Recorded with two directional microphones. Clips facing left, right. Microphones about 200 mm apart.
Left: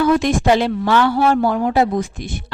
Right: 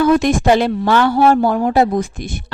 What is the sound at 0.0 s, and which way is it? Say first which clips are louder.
A woman's voice: right 2 dB; 45° right (ahead or behind).